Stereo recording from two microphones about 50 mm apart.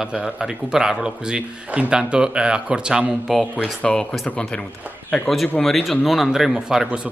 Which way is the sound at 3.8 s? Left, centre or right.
Centre.